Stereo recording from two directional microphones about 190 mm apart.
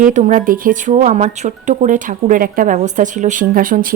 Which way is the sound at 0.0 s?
40° right (ahead or behind).